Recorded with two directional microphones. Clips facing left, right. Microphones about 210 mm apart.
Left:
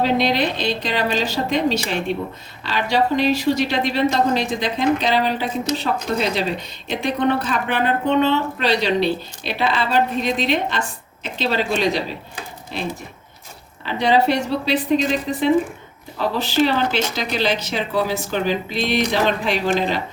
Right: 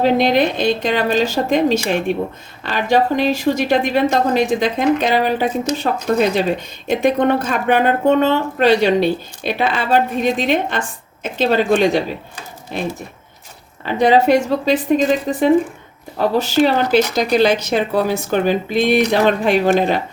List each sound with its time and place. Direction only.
0.0 s a woman's voice: 50° right (ahead or behind)